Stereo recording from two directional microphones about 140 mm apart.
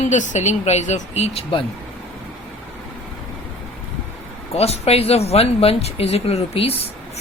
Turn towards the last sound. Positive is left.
turn(degrees=45)  # may be behind; listen again after turning